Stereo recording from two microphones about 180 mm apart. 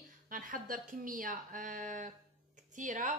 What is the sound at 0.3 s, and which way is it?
A woman's voice, 50° right (ahead or behind).